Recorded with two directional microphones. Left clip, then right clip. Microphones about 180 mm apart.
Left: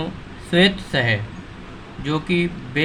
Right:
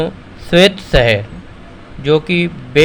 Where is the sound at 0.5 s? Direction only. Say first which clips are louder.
Right 8 dB; 45° right (ahead or behind).